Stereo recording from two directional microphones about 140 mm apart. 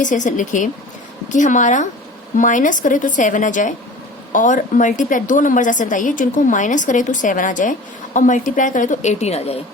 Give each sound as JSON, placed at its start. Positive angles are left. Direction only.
{"t": 0.0, "sound": "a woman's voice", "side_deg": 65}